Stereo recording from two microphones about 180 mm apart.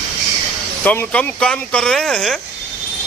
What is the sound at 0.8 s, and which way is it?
A man's voice, 10° left (ahead or behind).